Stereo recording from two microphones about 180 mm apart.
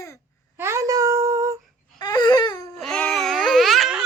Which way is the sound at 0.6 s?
15° right (ahead or behind).